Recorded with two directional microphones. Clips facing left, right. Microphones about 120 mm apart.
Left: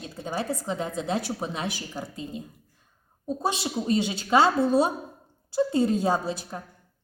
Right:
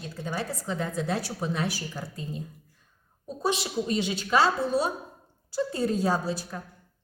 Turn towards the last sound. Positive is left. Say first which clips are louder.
# left 2 dB
turn(degrees=25)  # may be behind; listen again after turning